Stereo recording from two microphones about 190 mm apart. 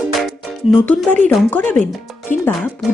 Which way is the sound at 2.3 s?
40° left (ahead or behind).